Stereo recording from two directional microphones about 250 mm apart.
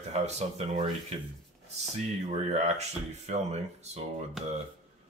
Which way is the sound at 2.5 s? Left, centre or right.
Right.